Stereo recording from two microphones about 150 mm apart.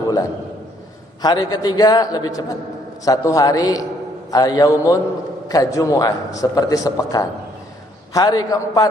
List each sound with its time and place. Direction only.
1.2 s a man's voice: 25° left (ahead or behind)